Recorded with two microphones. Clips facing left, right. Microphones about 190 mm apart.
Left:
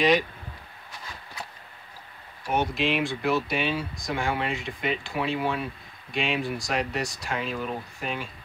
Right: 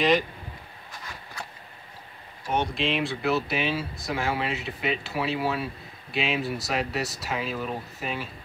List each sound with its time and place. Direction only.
2.4 s speech: 5° left (ahead or behind)